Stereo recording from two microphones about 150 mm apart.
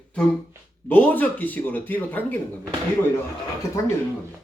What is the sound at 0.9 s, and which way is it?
Speech, 10° left (ahead or behind).